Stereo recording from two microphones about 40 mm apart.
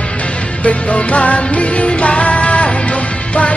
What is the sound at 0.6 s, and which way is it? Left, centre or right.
Music, left.